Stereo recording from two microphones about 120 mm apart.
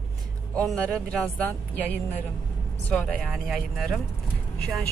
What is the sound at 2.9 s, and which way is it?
Speech, 10° left (ahead or behind).